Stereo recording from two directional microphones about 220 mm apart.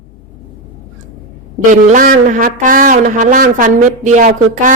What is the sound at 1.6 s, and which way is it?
A man's voice, 35° right (ahead or behind).